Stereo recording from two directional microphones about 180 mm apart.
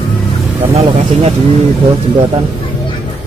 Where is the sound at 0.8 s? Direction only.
35° right (ahead or behind).